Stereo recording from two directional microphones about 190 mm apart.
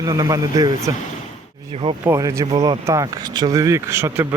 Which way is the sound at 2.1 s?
15° right (ahead or behind).